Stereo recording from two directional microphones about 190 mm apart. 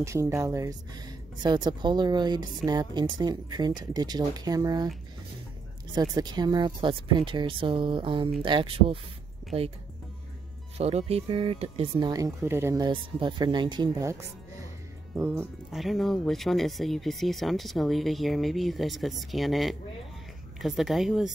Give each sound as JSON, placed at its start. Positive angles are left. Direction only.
{"t": 0.0, "sound": "speech", "side_deg": -15}
{"t": 5.9, "sound": "speech", "side_deg": -20}
{"t": 10.8, "sound": "speech", "side_deg": -35}
{"t": 12.1, "sound": "speech", "side_deg": -15}
{"t": 15.1, "sound": "speech", "side_deg": -10}
{"t": 15.7, "sound": "speech", "side_deg": 0}